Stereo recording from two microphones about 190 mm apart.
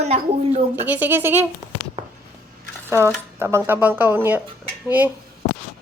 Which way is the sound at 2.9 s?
15° right (ahead or behind).